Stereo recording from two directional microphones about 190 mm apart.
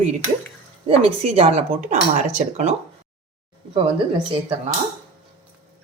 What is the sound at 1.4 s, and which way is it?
Speech, 35° right (ahead or behind).